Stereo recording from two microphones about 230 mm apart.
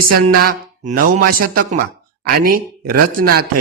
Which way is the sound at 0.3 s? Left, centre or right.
Right.